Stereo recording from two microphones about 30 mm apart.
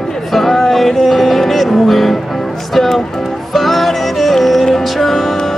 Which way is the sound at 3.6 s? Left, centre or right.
Centre.